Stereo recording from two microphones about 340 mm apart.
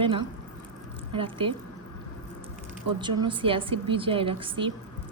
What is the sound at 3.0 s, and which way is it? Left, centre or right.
A woman's voice, centre.